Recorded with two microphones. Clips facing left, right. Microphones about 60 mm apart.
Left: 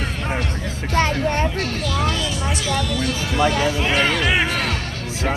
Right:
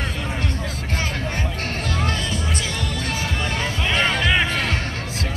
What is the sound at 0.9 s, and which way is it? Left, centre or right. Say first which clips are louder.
Music: left 9 dB; left.